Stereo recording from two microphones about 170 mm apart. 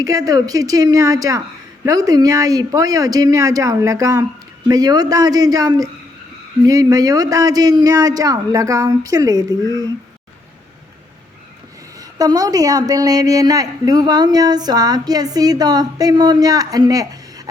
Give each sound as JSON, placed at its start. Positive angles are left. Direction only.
{"t": 0.0, "sound": "a woman's voice", "side_deg": -20}
{"t": 11.9, "sound": "a woman's voice", "side_deg": -20}